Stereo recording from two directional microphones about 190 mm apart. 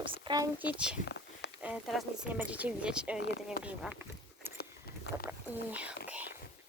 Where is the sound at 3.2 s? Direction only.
65° left (ahead or behind).